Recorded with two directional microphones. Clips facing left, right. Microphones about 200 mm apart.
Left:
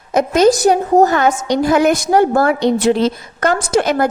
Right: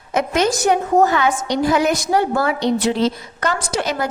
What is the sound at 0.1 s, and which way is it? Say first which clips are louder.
A woman's voice: left 7 dB; 40° left (ahead or behind).